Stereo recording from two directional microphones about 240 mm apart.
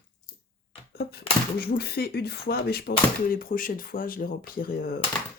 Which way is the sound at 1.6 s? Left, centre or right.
Left.